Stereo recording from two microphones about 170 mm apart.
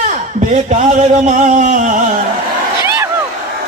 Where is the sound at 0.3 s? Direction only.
50° right (ahead or behind).